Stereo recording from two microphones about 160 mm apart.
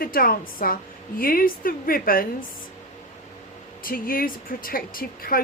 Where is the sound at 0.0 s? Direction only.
65° left (ahead or behind).